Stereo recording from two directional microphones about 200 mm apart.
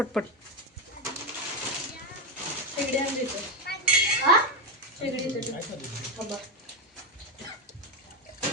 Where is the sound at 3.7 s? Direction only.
50° left (ahead or behind).